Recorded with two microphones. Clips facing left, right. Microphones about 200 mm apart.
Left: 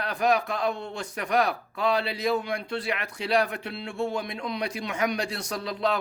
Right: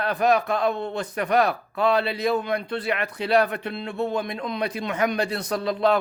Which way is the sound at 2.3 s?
55° right (ahead or behind).